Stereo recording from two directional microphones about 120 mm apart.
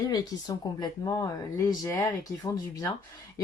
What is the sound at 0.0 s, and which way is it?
Speech, 30° left (ahead or behind).